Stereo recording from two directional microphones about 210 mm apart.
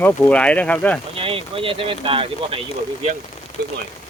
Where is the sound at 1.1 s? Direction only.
25° right (ahead or behind).